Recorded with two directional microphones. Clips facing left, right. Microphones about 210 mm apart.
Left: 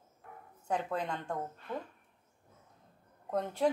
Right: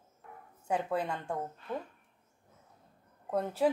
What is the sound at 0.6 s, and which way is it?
Speech, 10° right (ahead or behind).